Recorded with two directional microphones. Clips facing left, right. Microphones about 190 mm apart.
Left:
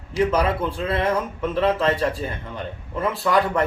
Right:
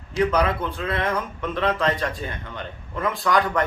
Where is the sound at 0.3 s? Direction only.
30° left (ahead or behind).